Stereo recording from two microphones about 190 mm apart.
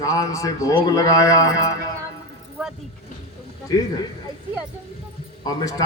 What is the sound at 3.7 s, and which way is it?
Speech, 20° left (ahead or behind).